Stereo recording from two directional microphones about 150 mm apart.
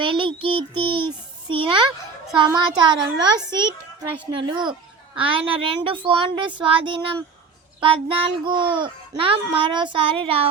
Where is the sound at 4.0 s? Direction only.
30° right (ahead or behind).